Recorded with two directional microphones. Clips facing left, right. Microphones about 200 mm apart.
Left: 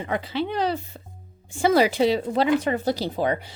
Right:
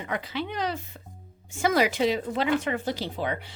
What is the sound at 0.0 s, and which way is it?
Speech, 30° left (ahead or behind).